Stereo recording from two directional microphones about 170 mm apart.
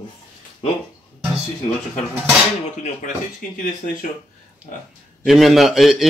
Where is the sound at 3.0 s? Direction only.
50° left (ahead or behind).